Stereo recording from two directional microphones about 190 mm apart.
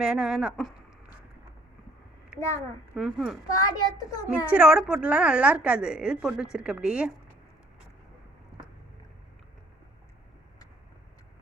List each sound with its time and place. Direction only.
0.0 s a woman's voice: 5° right (ahead or behind)
2.9 s a woman's voice: centre (ahead or behind)
3.5 s a child's voice: 20° left (ahead or behind)
4.3 s a woman's voice: 5° right (ahead or behind)